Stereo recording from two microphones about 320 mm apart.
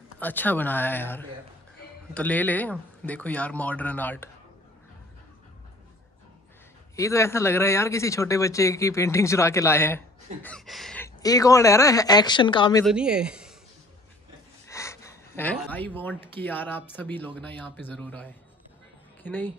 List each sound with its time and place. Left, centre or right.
0.2 s speech: centre
7.0 s speech: centre
12.8 s speech: centre
14.7 s a woman's voice: centre